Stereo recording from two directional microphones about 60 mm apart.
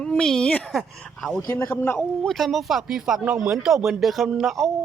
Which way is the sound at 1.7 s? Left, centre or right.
Left.